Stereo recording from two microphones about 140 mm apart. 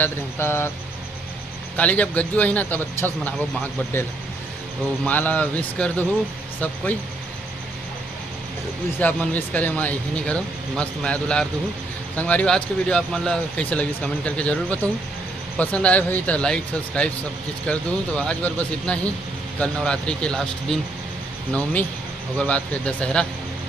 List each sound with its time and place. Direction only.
0.0 s speech: 15° left (ahead or behind)
1.7 s speech: 10° left (ahead or behind)
5.0 s speech: 10° left (ahead or behind)
9.0 s speech: 10° left (ahead or behind)